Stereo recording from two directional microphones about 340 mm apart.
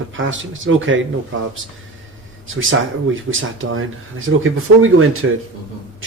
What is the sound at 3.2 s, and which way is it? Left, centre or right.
Speech, right.